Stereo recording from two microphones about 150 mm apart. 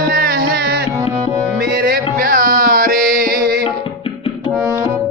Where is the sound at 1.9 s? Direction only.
70° right (ahead or behind).